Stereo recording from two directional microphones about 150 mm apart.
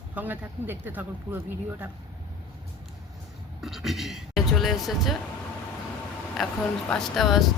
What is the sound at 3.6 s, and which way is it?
Speech, centre (ahead or behind).